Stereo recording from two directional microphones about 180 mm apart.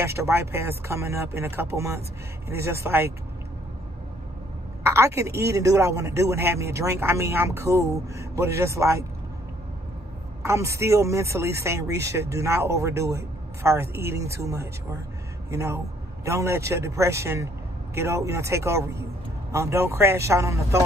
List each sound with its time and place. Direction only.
0.0 s speech: 15° right (ahead or behind)
4.8 s a woman's voice: 15° right (ahead or behind)
10.4 s speech: 15° right (ahead or behind)